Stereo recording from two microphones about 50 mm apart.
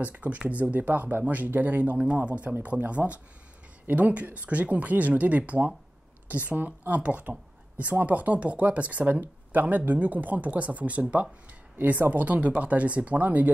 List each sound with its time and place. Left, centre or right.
0.0 s speech: right
2.0 s speech: right